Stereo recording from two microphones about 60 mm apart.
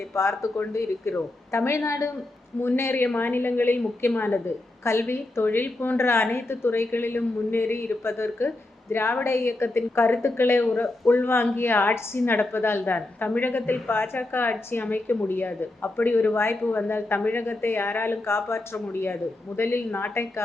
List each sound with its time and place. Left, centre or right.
0.1 s a woman's voice: left
2.6 s speech: left
6.0 s a woman's voice: left
13.1 s speech: left